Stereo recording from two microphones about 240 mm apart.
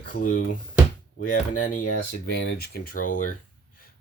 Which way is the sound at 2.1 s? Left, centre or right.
Left.